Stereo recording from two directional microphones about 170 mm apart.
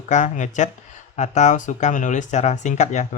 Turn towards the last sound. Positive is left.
turn(degrees=45)  # may be behind; listen again after turning